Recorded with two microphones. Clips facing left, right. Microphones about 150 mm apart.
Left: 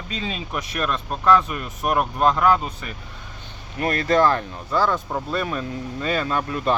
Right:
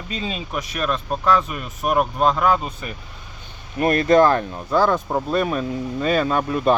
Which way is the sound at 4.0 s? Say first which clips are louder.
Right 3 dB; 20° right (ahead or behind).